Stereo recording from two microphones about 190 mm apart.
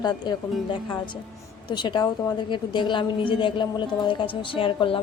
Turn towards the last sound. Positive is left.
turn(degrees=25)  # may be behind; listen again after turning